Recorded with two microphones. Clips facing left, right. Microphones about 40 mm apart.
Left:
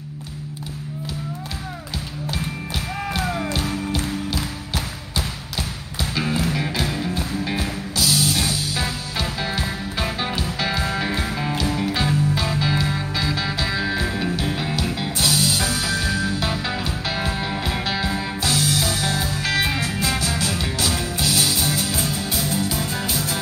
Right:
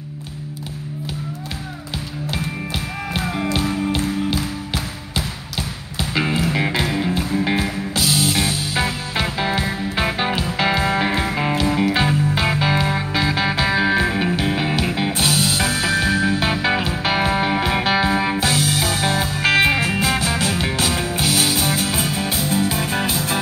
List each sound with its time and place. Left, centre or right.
3.5 s music: right